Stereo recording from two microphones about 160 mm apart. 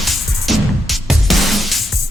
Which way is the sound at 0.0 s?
Centre (ahead or behind).